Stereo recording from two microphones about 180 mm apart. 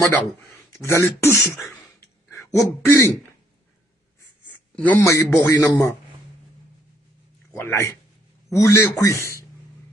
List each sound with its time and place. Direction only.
0.0 s a man's voice: 10° left (ahead or behind)
2.0 s a sound: 15° left (ahead or behind)
4.7 s a man's voice: 10° left (ahead or behind)
7.5 s a man's voice: 15° left (ahead or behind)